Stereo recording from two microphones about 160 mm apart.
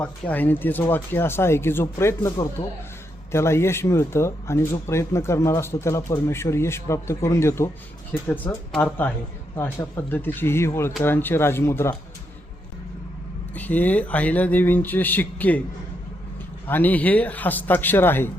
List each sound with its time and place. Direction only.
0.0 s speech: 10° left (ahead or behind)
2.6 s speech: 40° left (ahead or behind)
3.3 s speech: 15° left (ahead or behind)
13.5 s speech: 10° left (ahead or behind)
16.6 s speech: 10° left (ahead or behind)